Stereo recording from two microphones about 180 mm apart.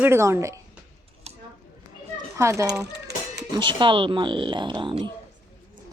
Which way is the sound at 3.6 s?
25° right (ahead or behind).